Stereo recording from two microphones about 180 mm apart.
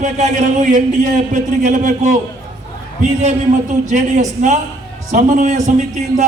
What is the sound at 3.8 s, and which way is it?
A man's voice, 45° right (ahead or behind).